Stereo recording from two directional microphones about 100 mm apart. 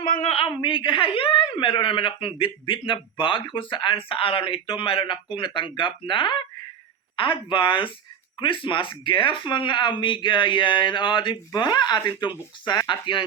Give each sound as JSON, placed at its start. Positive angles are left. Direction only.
{"t": 0.3, "sound": "a woman's voice", "side_deg": 75}
{"t": 0.5, "sound": "speech", "side_deg": 55}